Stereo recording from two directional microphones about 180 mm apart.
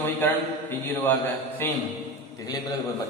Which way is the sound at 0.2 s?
10° left (ahead or behind).